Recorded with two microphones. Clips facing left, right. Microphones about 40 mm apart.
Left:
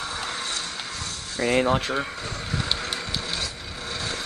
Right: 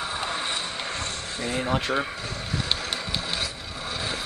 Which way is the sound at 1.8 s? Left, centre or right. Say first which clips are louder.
Right 1 dB; centre.